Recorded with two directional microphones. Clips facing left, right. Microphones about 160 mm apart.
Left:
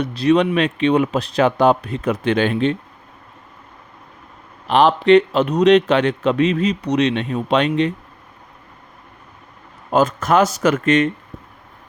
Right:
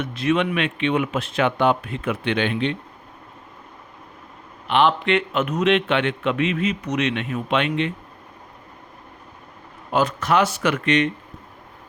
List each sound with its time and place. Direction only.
0.0 s a man's voice: 35° left (ahead or behind)
4.7 s a man's voice: 40° left (ahead or behind)
9.9 s speech: 45° left (ahead or behind)